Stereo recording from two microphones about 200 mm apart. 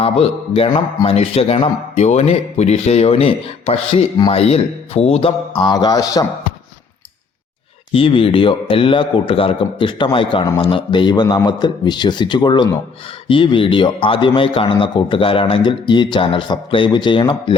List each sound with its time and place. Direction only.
0.0 s a man's voice: 30° left (ahead or behind)
7.9 s a man's voice: 25° left (ahead or behind)